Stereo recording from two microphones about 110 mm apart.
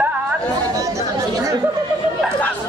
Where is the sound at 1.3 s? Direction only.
30° right (ahead or behind).